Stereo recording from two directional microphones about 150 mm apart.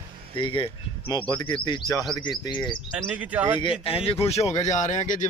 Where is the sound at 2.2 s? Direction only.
30° left (ahead or behind).